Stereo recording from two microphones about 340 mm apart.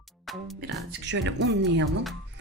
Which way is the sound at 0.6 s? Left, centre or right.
Right.